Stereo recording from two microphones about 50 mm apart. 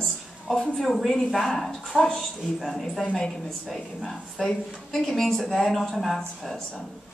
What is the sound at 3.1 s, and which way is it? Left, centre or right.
Speech, centre.